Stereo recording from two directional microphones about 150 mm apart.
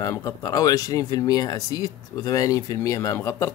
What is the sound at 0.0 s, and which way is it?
Speech, 25° left (ahead or behind).